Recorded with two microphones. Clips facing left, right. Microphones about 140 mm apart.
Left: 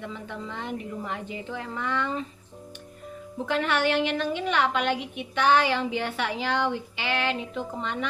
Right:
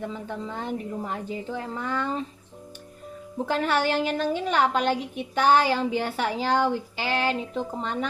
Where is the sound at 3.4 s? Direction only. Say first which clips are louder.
Right 1 dB; 40° right (ahead or behind).